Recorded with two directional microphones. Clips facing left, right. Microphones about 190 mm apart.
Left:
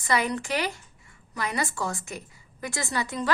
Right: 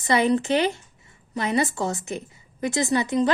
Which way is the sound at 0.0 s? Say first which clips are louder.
Right 6 dB; 25° right (ahead or behind).